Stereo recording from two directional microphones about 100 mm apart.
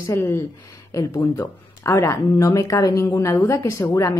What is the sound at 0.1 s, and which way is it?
Speech, 25° left (ahead or behind).